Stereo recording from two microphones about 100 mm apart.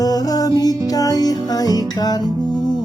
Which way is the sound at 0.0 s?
40° left (ahead or behind).